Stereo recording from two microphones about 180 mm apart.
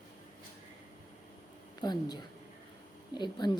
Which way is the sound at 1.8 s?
25° left (ahead or behind).